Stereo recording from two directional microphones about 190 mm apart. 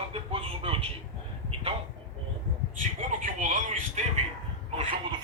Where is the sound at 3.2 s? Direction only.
45° right (ahead or behind).